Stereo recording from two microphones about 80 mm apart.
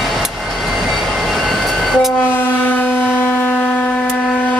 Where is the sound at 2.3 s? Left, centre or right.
Left.